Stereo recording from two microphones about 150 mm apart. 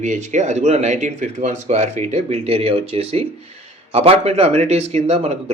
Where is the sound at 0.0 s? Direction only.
55° right (ahead or behind).